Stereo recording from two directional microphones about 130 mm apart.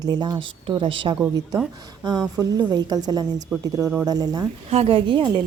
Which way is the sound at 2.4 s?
30° right (ahead or behind).